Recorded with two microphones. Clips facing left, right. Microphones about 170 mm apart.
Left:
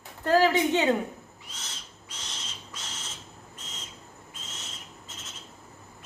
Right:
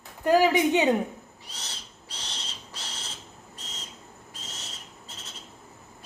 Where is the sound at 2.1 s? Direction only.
35° right (ahead or behind).